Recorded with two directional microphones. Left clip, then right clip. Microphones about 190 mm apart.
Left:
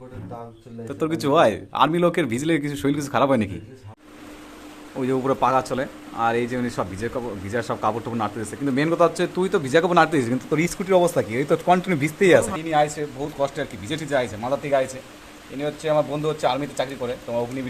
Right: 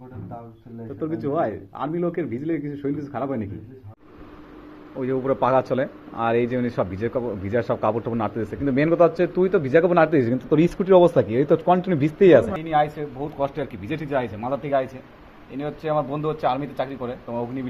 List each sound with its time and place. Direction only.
0.9 s a man's voice: 40° left (ahead or behind)
4.9 s a man's voice: 20° left (ahead or behind)
5.4 s speech: centre (ahead or behind)